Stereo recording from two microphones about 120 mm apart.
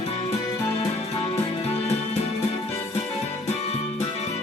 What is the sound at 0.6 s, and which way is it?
Music, 25° left (ahead or behind).